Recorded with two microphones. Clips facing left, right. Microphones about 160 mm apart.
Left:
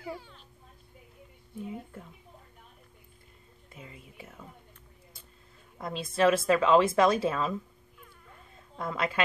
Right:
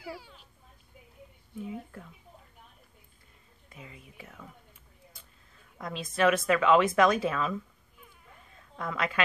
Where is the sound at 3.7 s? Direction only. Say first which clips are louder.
Left 1 dB; 30° left (ahead or behind).